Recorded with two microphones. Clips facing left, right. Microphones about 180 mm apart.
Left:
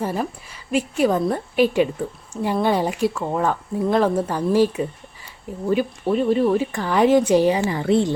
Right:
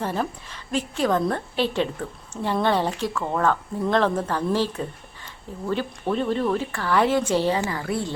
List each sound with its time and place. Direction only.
0.0 s speech: 10° left (ahead or behind)